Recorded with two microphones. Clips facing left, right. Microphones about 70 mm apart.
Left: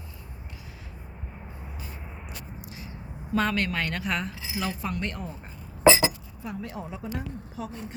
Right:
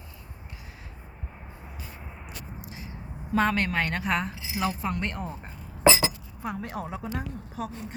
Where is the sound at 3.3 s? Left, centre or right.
Right.